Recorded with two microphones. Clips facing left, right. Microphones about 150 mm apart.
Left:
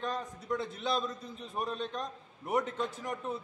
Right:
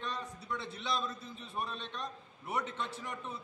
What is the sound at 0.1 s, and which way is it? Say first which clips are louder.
A man's voice: left 5 dB; 45° left (ahead or behind).